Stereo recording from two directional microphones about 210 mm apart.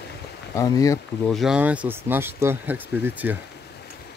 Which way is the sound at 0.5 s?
15° left (ahead or behind).